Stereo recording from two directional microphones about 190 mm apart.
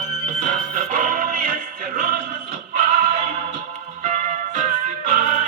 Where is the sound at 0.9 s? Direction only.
45° right (ahead or behind).